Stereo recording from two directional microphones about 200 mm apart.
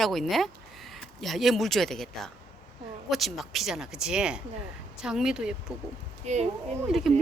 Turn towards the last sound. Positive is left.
turn(degrees=0)  # may be behind; listen again after turning